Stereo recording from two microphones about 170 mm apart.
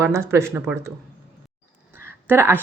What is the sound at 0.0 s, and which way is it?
Speech, 15° right (ahead or behind).